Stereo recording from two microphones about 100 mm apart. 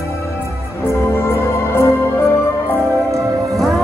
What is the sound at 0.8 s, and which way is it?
Music, 25° left (ahead or behind).